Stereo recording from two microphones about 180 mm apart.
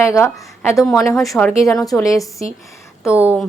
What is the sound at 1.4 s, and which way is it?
Speech, 5° left (ahead or behind).